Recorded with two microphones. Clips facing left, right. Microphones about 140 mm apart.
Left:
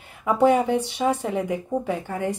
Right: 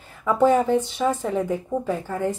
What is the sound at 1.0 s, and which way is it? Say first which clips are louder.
Speech: even; 15° left (ahead or behind).